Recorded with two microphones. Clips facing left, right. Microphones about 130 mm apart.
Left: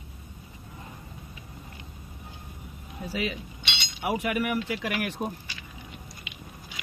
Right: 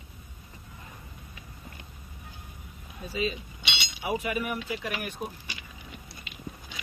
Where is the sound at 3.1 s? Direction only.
90° left.